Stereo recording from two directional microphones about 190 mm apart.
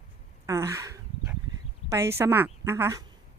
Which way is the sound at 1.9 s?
15° right (ahead or behind).